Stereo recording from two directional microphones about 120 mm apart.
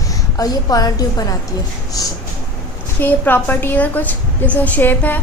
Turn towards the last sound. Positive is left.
turn(degrees=15)  # may be behind; listen again after turning